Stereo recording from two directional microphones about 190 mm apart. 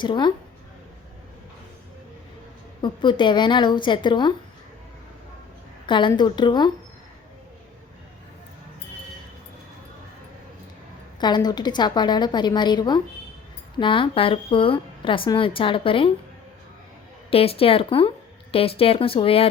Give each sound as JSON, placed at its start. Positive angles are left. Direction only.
{"t": 0.0, "sound": "a woman's voice", "side_deg": 25}
{"t": 2.8, "sound": "a woman's voice", "side_deg": 25}
{"t": 5.8, "sound": "a woman's voice", "side_deg": 25}
{"t": 11.2, "sound": "a woman's voice", "side_deg": 20}
{"t": 17.3, "sound": "a woman's voice", "side_deg": 30}